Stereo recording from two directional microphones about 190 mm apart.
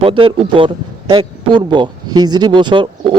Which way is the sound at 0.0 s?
25° right (ahead or behind).